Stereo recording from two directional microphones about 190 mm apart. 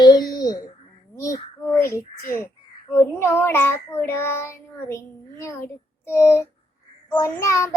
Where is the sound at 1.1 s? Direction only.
15° left (ahead or behind).